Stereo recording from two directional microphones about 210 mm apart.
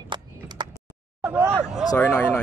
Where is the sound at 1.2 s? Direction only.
10° right (ahead or behind).